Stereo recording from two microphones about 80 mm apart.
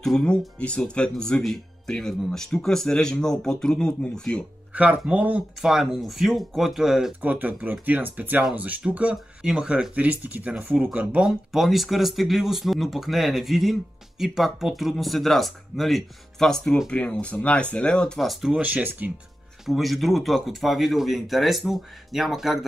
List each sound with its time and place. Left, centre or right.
0.0 s speech: centre
4.7 s speech: centre
5.6 s speech: centre
7.2 s speech: right
11.1 s speech: centre
16.9 s speech: centre
18.2 s speech: centre
18.5 s speech: centre
19.6 s speech: centre